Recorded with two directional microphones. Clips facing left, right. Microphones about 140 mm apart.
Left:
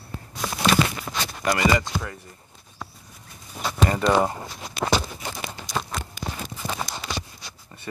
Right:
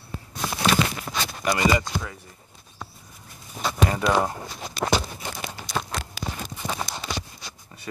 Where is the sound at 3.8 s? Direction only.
5° right (ahead or behind).